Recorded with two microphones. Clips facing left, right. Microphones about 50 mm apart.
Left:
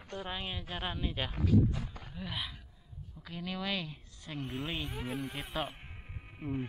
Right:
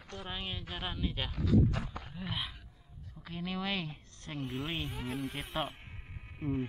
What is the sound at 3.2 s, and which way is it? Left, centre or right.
Speech, right.